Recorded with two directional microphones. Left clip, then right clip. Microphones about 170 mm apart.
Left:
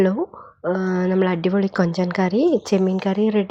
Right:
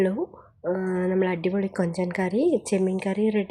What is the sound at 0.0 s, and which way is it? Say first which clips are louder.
Speech: left 5 dB; 15° left (ahead or behind).